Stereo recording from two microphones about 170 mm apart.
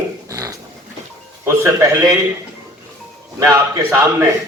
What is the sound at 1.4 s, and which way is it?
Speech, 15° right (ahead or behind).